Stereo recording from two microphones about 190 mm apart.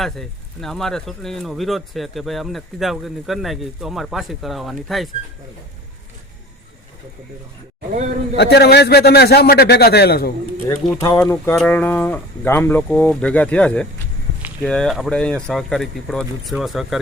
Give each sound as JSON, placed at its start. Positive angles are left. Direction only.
{"t": 0.0, "sound": "speech", "side_deg": 0}
{"t": 7.9, "sound": "a man's voice", "side_deg": -35}
{"t": 8.4, "sound": "a man's voice", "side_deg": 60}
{"t": 11.2, "sound": "speech", "side_deg": 10}